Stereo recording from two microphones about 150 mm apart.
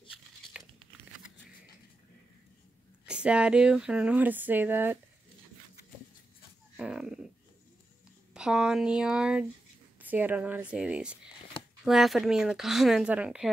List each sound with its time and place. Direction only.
3.1 s speech: 5° right (ahead or behind)
6.8 s a sound: 5° right (ahead or behind)
8.4 s speech: 5° right (ahead or behind)